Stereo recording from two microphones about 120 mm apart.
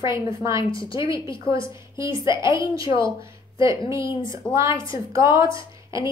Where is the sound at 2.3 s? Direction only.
40° left (ahead or behind).